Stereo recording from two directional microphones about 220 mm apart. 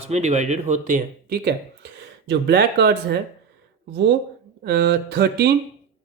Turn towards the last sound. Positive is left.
turn(degrees=-50)  # may be behind; listen again after turning